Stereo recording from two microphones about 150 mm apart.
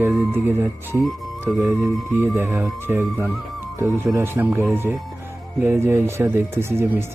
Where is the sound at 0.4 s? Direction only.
15° right (ahead or behind).